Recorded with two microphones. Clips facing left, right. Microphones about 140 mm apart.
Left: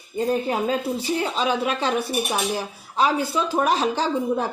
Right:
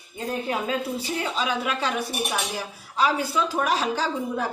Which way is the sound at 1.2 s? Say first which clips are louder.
Left 3 dB; 30° left (ahead or behind).